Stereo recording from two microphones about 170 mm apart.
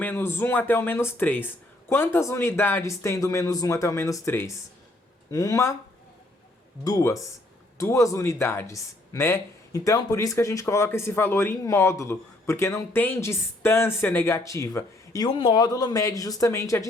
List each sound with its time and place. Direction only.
0.0 s speech: 10° left (ahead or behind)
6.8 s speech: 20° left (ahead or behind)
15.3 s speech: 30° left (ahead or behind)